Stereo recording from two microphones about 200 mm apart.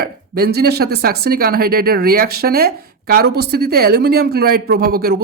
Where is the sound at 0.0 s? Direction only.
50° right (ahead or behind).